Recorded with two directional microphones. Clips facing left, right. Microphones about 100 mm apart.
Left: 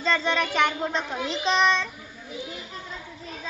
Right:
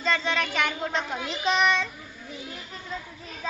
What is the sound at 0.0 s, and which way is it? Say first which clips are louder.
A child's voice: left 2 dB; centre (ahead or behind).